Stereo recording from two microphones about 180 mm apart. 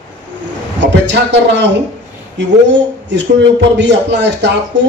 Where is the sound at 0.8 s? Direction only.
75° right (ahead or behind).